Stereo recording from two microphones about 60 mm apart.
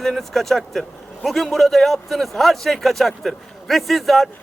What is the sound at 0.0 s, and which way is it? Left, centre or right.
A man's voice, centre.